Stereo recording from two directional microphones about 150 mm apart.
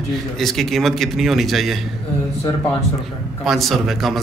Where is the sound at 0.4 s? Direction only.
Centre (ahead or behind).